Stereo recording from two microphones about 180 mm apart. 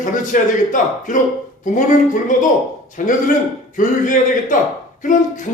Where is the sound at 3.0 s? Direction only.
45° left (ahead or behind).